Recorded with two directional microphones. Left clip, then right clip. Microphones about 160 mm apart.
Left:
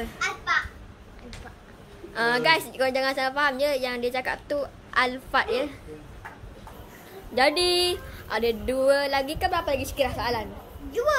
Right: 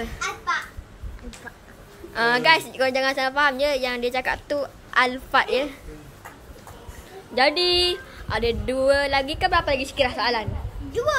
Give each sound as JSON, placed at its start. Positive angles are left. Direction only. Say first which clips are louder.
{"t": 2.1, "sound": "a woman's voice", "louder": "right 4 dB", "side_deg": -10}
{"t": 7.3, "sound": "speech", "louder": "right 2 dB", "side_deg": 0}
{"t": 10.9, "sound": "speech", "louder": "right 1 dB", "side_deg": -90}